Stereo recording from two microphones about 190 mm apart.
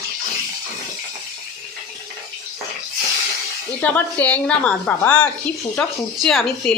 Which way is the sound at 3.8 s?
10° left (ahead or behind).